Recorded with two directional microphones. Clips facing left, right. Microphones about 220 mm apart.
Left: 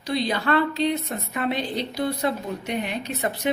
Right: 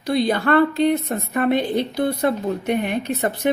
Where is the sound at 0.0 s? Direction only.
50° right (ahead or behind).